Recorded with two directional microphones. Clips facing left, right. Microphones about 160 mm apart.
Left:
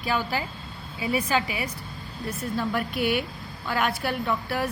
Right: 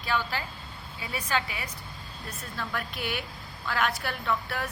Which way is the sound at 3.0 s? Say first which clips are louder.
Left 10 dB; 55° left (ahead or behind).